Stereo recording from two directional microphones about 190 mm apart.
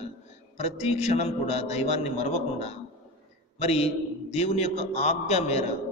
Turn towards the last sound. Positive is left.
turn(degrees=35)  # may be behind; listen again after turning